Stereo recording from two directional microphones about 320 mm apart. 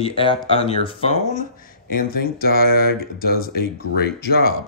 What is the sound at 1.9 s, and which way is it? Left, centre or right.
Speech, left.